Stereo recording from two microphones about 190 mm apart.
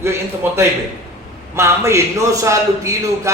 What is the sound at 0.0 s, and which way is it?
A man's voice, 15° right (ahead or behind).